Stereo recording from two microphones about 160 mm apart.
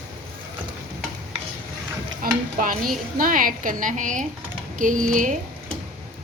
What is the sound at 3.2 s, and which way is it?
Speech, 60° right (ahead or behind).